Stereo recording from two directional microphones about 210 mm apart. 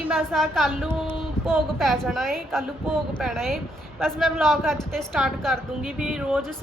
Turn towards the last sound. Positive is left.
turn(degrees=-5)  # may be behind; listen again after turning